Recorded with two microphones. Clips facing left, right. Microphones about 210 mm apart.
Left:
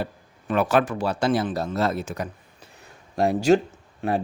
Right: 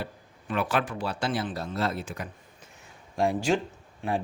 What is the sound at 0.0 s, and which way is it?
A man's voice, 45° left (ahead or behind).